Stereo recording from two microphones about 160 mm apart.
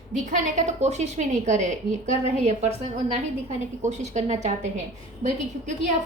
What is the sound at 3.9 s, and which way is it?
A woman's voice, 45° right (ahead or behind).